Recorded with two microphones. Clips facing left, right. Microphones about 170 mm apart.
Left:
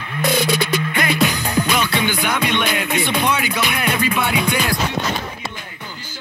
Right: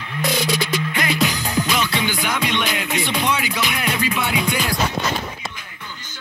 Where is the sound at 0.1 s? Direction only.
55° left (ahead or behind).